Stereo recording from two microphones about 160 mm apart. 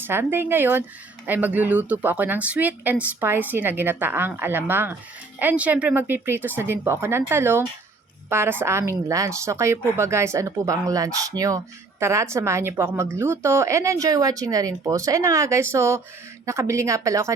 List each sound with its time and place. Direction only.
0.0 s speech: 15° right (ahead or behind)